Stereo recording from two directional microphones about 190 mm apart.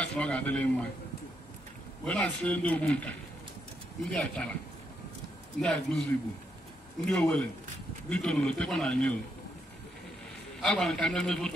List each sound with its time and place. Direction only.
0.0 s a man's voice: 5° left (ahead or behind)
2.0 s a man's voice: 5° left (ahead or behind)
5.6 s a man's voice: 5° left (ahead or behind)
7.1 s a man's voice: 5° left (ahead or behind)
10.6 s a man's voice: 5° left (ahead or behind)